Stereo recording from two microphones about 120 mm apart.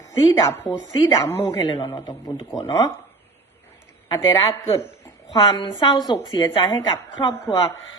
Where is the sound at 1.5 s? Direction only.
35° left (ahead or behind).